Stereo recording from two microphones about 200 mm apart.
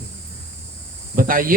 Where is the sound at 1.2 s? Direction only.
45° right (ahead or behind).